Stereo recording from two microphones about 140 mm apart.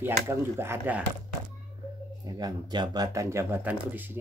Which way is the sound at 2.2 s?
25° right (ahead or behind).